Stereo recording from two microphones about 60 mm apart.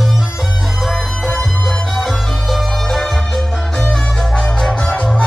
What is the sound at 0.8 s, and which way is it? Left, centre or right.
Music, centre.